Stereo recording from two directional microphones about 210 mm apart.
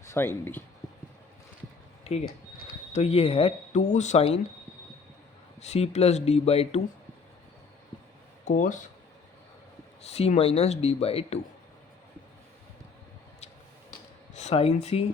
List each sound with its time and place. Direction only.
0.0 s speech: 10° left (ahead or behind)
2.1 s speech: 30° left (ahead or behind)
5.5 s speech: 30° left (ahead or behind)
8.4 s speech: 35° left (ahead or behind)
10.0 s speech: 30° left (ahead or behind)
14.3 s speech: 30° left (ahead or behind)